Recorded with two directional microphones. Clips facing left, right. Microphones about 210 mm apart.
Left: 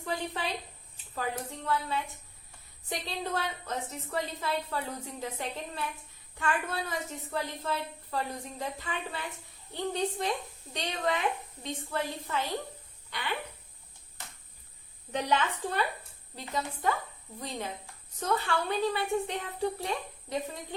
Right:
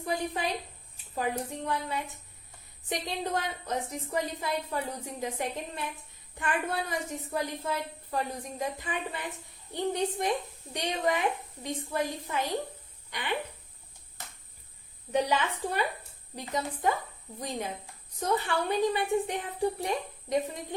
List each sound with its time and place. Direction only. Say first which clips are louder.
0.0 s a woman's voice: right 3 dB; 15° right (ahead or behind)
15.1 s a woman's voice: right 2 dB; 10° right (ahead or behind)
18.2 s a woman's voice: right 1 dB; 15° right (ahead or behind)